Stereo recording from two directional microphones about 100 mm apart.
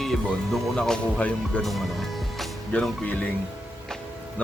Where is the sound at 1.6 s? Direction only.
Centre (ahead or behind).